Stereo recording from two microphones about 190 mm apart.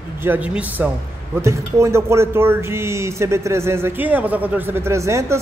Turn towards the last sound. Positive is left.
turn(degrees=-15)  # may be behind; listen again after turning